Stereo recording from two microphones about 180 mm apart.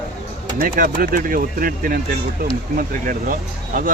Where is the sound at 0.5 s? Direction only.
50° right (ahead or behind).